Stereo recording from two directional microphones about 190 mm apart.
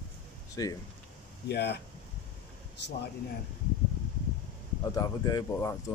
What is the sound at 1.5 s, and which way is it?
Speech, 60° left (ahead or behind).